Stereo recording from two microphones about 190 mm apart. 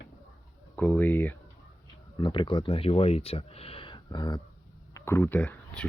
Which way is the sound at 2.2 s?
25° left (ahead or behind).